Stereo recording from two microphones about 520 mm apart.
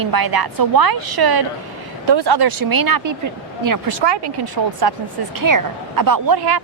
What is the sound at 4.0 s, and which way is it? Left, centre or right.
Speech, right.